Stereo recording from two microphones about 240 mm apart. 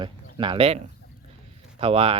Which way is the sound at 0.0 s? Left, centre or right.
Right.